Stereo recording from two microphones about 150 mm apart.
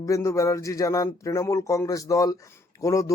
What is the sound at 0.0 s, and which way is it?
Mantra, 20° left (ahead or behind).